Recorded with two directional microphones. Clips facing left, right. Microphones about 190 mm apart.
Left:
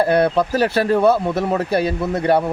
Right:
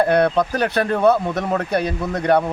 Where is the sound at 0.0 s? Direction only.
30° left (ahead or behind).